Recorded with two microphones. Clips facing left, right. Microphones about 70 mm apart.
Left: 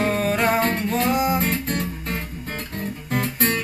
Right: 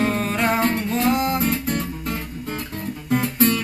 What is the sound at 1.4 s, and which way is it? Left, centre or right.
Music, left.